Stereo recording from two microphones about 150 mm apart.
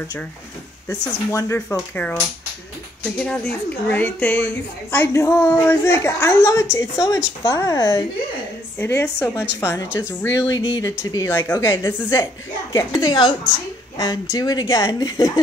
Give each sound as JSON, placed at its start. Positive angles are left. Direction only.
{"t": 1.3, "sound": "a woman's voice", "side_deg": 20}
{"t": 3.2, "sound": "a woman's voice", "side_deg": 5}